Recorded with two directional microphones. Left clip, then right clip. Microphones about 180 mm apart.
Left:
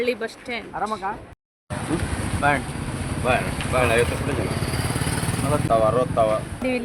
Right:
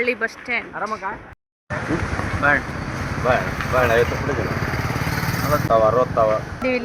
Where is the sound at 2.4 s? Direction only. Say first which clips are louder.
Right 3 dB; 75° left (ahead or behind).